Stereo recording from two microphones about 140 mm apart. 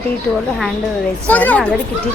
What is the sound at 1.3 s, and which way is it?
Speech, 10° left (ahead or behind).